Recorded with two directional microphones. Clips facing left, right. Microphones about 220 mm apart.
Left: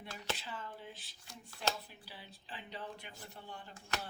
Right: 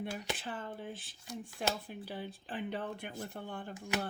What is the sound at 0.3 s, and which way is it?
Speech, 55° right (ahead or behind).